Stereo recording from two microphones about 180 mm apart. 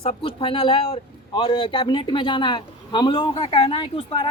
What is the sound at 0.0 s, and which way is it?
A man's voice, 30° left (ahead or behind).